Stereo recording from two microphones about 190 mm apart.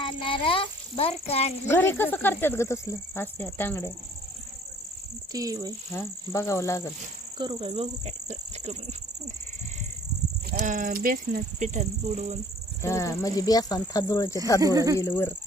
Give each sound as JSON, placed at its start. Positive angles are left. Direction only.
{"t": 0.0, "sound": "speech", "side_deg": 25}
{"t": 1.6, "sound": "speech", "side_deg": 10}
{"t": 5.3, "sound": "speech", "side_deg": -20}
{"t": 5.9, "sound": "speech", "side_deg": 15}
{"t": 7.3, "sound": "speech", "side_deg": -25}
{"t": 10.5, "sound": "speech", "side_deg": -45}
{"t": 12.8, "sound": "speech", "side_deg": 15}
{"t": 14.6, "sound": "speech", "side_deg": -20}
{"t": 14.9, "sound": "speech", "side_deg": 15}